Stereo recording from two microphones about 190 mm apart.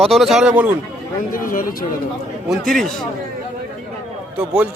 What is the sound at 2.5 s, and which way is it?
Speech, centre (ahead or behind).